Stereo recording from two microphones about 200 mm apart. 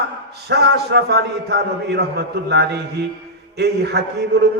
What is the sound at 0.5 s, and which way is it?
A man's voice, 55° right (ahead or behind).